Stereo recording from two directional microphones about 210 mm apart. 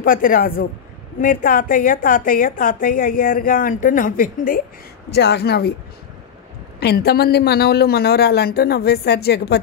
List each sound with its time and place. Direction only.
0.0 s a man's voice: 40° left (ahead or behind)
5.1 s a man's voice: 55° left (ahead or behind)
6.8 s a man's voice: 50° left (ahead or behind)